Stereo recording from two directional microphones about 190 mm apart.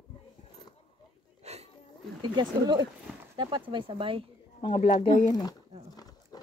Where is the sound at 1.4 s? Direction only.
35° right (ahead or behind).